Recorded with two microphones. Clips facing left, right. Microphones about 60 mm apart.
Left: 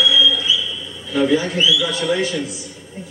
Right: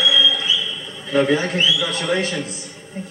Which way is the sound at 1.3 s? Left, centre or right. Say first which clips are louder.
Left 1 dB; right.